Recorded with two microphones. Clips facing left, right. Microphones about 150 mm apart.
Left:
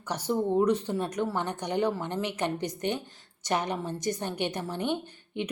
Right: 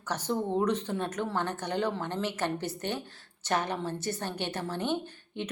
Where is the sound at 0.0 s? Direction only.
10° left (ahead or behind).